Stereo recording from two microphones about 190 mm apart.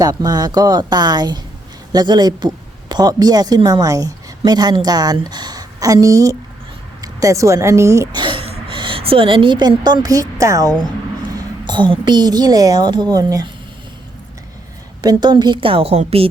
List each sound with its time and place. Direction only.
0.0 s a woman's voice: 20° right (ahead or behind)
15.0 s a woman's voice: 20° right (ahead or behind)